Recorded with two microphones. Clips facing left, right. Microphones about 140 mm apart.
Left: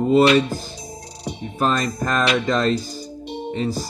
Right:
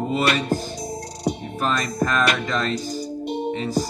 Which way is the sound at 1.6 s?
30° left (ahead or behind).